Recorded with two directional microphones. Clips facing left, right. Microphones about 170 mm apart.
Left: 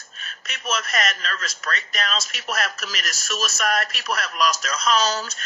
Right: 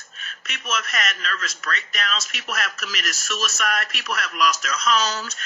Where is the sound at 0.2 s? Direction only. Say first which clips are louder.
Left 1 dB; 35° left (ahead or behind).